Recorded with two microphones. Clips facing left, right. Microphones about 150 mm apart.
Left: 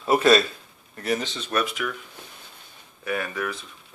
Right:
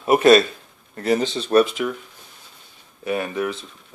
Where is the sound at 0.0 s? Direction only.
20° right (ahead or behind).